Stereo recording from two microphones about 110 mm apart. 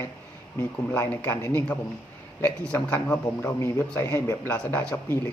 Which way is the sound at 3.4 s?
25° left (ahead or behind).